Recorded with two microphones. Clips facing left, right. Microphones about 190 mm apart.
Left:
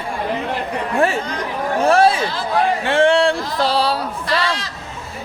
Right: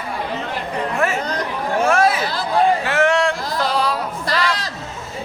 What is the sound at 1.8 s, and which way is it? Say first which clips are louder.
Speech: left 3 dB; 30° left (ahead or behind).